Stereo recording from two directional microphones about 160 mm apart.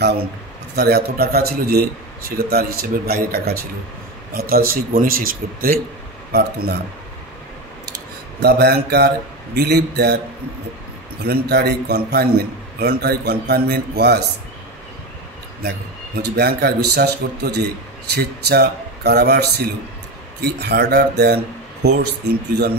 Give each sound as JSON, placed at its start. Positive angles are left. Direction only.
{"t": 0.7, "sound": "a man's voice", "side_deg": -80}
{"t": 6.3, "sound": "speech", "side_deg": -85}
{"t": 8.4, "sound": "a man's voice", "side_deg": -90}
{"t": 11.2, "sound": "a man's voice", "side_deg": -90}
{"t": 16.2, "sound": "a man's voice", "side_deg": -90}